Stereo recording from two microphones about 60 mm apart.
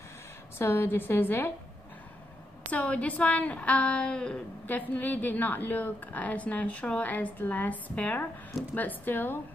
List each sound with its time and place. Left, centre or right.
0.6 s a woman's voice: left
2.7 s a woman's voice: left
4.6 s a woman's voice: left